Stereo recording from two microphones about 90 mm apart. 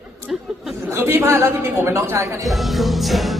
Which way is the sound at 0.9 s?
30° right (ahead or behind).